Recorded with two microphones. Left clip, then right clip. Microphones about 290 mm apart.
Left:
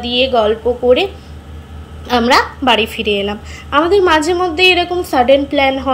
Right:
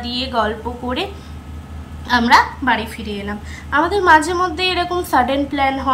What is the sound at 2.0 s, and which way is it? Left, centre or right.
A woman's voice, centre.